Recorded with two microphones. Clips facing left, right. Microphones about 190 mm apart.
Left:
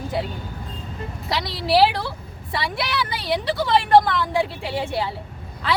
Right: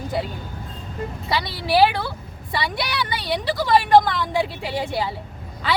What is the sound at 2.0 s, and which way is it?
A woman's voice, centre (ahead or behind).